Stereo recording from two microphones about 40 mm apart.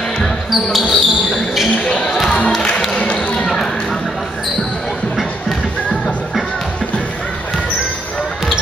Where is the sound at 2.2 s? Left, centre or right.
Left.